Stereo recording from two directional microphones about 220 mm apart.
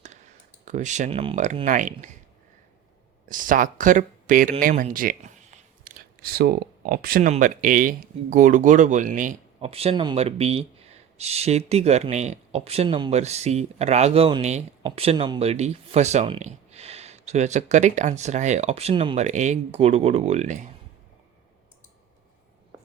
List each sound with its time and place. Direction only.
0.6 s speech: 35° right (ahead or behind)
3.2 s speech: 35° right (ahead or behind)